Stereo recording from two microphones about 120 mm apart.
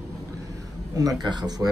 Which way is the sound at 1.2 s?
35° right (ahead or behind).